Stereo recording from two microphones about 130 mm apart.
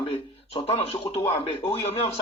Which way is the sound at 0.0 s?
50° left (ahead or behind).